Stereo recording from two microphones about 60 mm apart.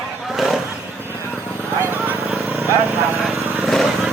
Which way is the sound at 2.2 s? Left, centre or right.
Right.